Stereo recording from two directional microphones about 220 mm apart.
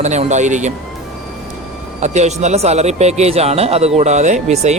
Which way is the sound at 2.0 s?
30° right (ahead or behind).